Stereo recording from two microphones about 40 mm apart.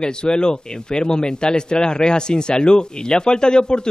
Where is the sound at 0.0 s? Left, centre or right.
Left.